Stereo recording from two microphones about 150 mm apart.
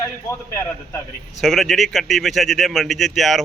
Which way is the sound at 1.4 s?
Centre (ahead or behind).